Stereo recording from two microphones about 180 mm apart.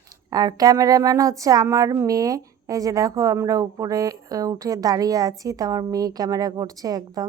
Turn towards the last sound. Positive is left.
turn(degrees=-20)  # may be behind; listen again after turning